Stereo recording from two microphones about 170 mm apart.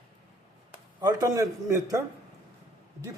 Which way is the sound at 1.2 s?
20° right (ahead or behind).